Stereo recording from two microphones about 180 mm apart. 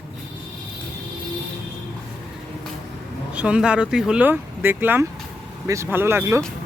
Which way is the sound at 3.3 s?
5° right (ahead or behind).